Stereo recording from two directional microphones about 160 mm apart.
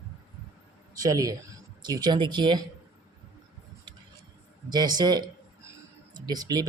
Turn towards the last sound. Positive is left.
turn(degrees=-25)  # may be behind; listen again after turning